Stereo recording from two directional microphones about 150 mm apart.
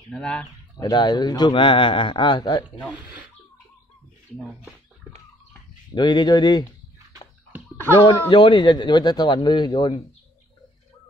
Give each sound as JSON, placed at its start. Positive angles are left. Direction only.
{"t": 0.1, "sound": "speech", "side_deg": 5}
{"t": 0.7, "sound": "a man's voice", "side_deg": 25}
{"t": 5.9, "sound": "a man's voice", "side_deg": 30}
{"t": 8.0, "sound": "speech", "side_deg": 35}